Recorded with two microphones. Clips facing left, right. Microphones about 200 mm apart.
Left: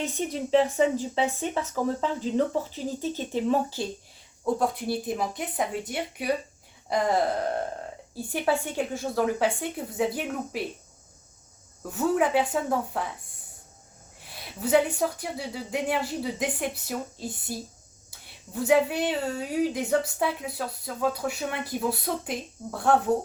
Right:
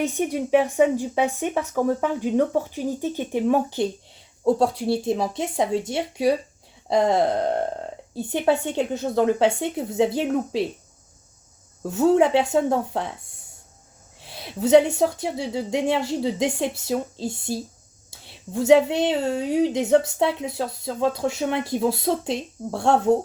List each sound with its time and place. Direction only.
0.0 s speech: 15° right (ahead or behind)
4.4 s speech: 30° right (ahead or behind)
6.9 s speech: 25° right (ahead or behind)
11.9 s speech: 25° right (ahead or behind)